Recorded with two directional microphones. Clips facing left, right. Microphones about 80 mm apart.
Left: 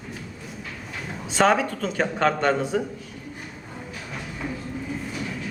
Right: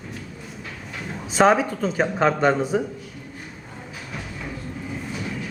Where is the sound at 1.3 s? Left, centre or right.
Centre.